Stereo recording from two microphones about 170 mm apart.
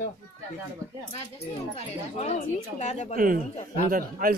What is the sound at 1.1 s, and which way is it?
Speech, 35° left (ahead or behind).